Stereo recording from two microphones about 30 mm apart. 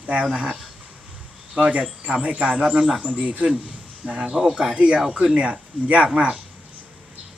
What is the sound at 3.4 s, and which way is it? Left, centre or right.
Speech, right.